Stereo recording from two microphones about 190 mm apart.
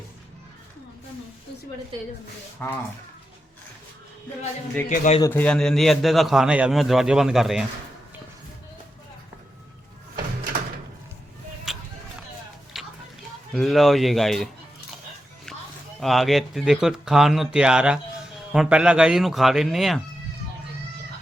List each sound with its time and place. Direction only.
2.6 s speech: 10° left (ahead or behind)
4.9 s a man's voice: 40° left (ahead or behind)
5.2 s a man's voice: 10° left (ahead or behind)
11.7 s a sound: centre (ahead or behind)
12.7 s music: centre (ahead or behind)
13.5 s a man's voice: centre (ahead or behind)
16.0 s a man's voice: centre (ahead or behind)